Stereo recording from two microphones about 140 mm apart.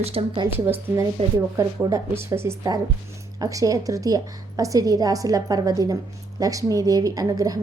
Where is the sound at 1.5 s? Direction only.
20° right (ahead or behind).